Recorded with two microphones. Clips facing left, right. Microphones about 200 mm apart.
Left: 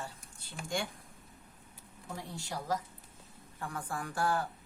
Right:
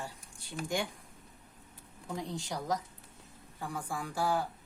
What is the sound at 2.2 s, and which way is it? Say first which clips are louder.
A woman's voice: right 4 dB; 15° right (ahead or behind).